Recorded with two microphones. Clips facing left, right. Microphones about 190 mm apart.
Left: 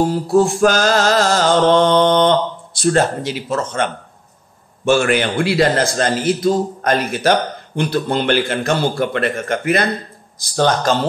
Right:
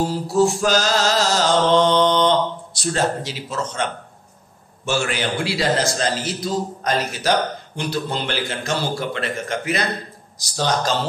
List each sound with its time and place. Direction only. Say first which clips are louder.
0.0 s a man's voice: left 4 dB; 55° left (ahead or behind)